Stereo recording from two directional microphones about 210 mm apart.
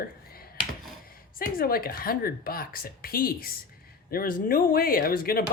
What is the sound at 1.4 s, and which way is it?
Speech, 45° left (ahead or behind).